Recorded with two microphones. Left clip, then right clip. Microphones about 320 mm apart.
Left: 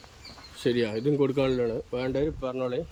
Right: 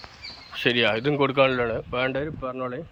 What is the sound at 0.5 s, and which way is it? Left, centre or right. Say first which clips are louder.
Speech: right 5 dB; centre.